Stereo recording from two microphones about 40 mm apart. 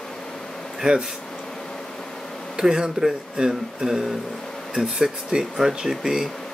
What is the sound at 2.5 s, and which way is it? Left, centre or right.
Speech, centre.